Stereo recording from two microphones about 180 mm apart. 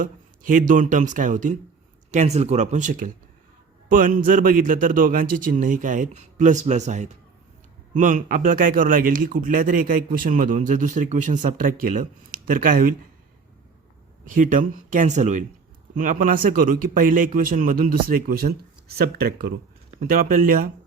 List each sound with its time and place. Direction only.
0.0 s speech: 45° right (ahead or behind)
14.3 s speech: 45° right (ahead or behind)